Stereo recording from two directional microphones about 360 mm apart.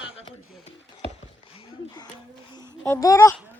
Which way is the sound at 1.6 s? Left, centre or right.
Centre.